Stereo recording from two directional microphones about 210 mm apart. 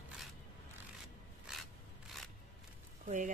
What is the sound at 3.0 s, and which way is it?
Speech, 35° right (ahead or behind).